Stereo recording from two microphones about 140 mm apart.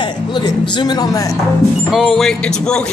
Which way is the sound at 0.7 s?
30° left (ahead or behind).